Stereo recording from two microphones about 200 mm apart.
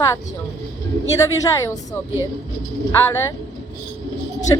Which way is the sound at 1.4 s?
15° left (ahead or behind).